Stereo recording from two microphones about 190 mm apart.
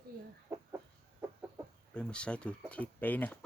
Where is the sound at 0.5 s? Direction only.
10° right (ahead or behind).